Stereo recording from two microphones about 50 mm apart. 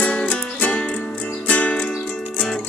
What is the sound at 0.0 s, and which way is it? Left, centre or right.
Music, left.